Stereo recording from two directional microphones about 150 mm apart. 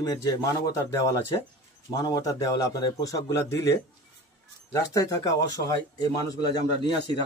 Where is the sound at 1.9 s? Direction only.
25° left (ahead or behind).